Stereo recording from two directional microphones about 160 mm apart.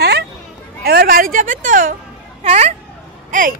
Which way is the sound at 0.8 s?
70° right (ahead or behind).